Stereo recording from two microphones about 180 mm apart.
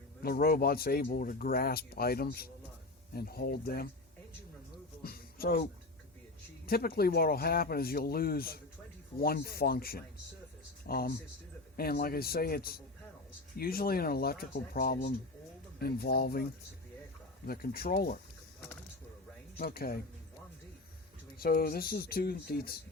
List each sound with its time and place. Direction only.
0.2 s speech: 55° left (ahead or behind)
5.0 s a sound: 55° left (ahead or behind)
6.7 s speech: 55° left (ahead or behind)
19.5 s speech: 60° left (ahead or behind)
21.3 s speech: 55° left (ahead or behind)